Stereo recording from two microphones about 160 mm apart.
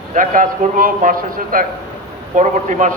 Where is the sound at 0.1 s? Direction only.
55° right (ahead or behind).